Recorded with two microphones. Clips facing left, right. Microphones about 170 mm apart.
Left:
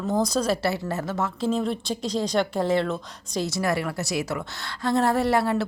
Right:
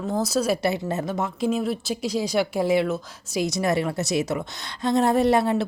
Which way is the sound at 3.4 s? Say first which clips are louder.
Right 3 dB; 20° right (ahead or behind).